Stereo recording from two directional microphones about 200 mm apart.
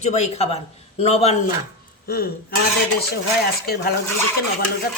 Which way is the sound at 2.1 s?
50° left (ahead or behind).